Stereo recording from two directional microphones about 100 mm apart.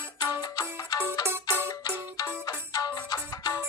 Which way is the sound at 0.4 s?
40° left (ahead or behind).